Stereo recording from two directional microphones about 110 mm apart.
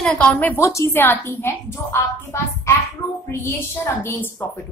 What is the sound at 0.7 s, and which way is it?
A woman's voice, 25° left (ahead or behind).